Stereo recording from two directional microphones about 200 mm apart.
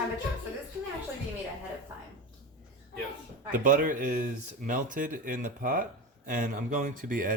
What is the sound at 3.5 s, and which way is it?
Speech, 40° right (ahead or behind).